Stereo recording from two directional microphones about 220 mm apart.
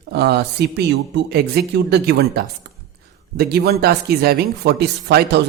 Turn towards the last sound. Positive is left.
turn(degrees=-50)  # may be behind; listen again after turning